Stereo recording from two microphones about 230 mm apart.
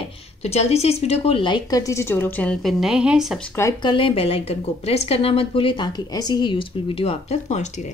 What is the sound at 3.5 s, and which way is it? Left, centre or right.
A woman's voice, centre.